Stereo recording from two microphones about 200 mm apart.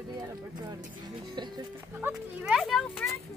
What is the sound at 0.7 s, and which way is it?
Speech, 20° right (ahead or behind).